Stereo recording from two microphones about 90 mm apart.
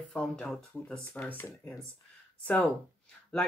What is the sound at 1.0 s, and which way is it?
Speech, 20° left (ahead or behind).